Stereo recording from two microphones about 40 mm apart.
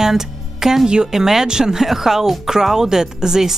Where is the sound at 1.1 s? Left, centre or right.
Centre.